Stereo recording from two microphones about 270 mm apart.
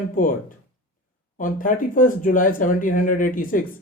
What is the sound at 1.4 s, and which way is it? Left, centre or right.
Speech, left.